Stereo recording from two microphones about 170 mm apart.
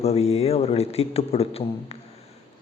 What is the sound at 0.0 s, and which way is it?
A man's voice, 35° left (ahead or behind).